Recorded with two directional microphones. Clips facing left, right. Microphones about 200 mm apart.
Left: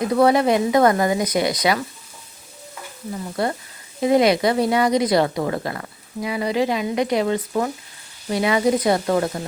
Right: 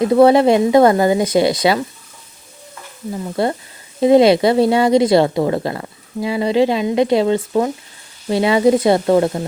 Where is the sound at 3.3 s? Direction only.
30° right (ahead or behind).